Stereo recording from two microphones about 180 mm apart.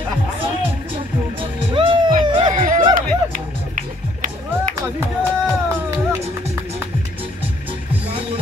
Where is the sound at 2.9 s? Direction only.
50° right (ahead or behind).